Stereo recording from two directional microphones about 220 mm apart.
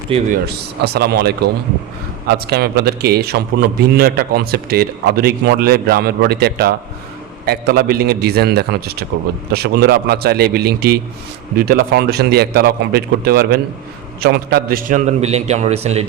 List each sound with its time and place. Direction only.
0.1 s a man's voice: 25° right (ahead or behind)
0.9 s a man's voice: 45° right (ahead or behind)
2.5 s a man's voice: 45° right (ahead or behind); by 16.0 s 30° right (ahead or behind)